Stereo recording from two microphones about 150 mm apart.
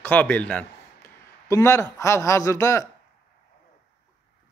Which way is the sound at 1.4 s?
20° left (ahead or behind).